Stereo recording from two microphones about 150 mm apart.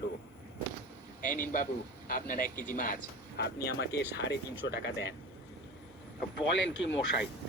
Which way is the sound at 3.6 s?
90° left.